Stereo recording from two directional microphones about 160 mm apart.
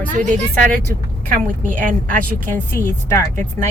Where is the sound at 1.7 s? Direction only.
55° right (ahead or behind).